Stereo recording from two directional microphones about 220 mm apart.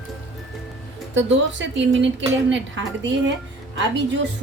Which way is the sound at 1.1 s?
55° right (ahead or behind).